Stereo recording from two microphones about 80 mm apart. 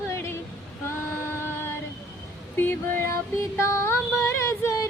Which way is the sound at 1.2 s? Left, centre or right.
Left.